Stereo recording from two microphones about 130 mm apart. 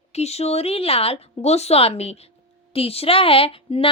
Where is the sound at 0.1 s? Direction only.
55° left (ahead or behind).